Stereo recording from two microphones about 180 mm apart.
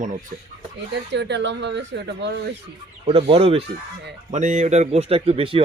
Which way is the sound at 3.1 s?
30° right (ahead or behind).